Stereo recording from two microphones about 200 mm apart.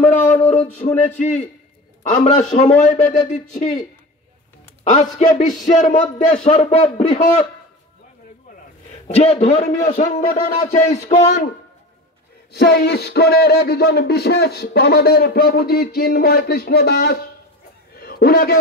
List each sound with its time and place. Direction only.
0.0 s a sound: 10° left (ahead or behind)
0.8 s a man's voice: 35° left (ahead or behind)
2.8 s a man's voice: 35° left (ahead or behind)
4.8 s a man's voice: 40° left (ahead or behind)
9.0 s a man's voice: 30° left (ahead or behind)
12.5 s speech: 50° left (ahead or behind)
17.9 s a sound: 50° left (ahead or behind)